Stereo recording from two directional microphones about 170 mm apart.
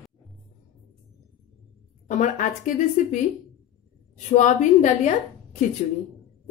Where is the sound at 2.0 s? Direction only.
45° left (ahead or behind).